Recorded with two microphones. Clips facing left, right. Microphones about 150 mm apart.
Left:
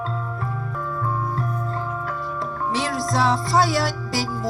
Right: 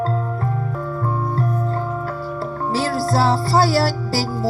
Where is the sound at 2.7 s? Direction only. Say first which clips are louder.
Right 4 dB; 35° right (ahead or behind).